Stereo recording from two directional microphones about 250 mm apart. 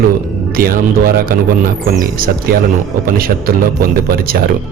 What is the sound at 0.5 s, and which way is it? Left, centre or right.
Speech, right.